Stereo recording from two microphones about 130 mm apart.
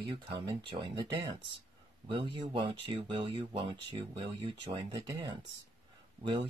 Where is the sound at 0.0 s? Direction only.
40° right (ahead or behind).